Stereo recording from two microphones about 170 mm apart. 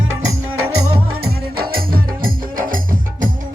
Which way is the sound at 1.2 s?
65° right (ahead or behind).